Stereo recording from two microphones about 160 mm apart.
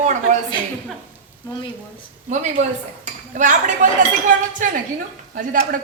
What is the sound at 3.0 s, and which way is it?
A woman's voice, 50° right (ahead or behind).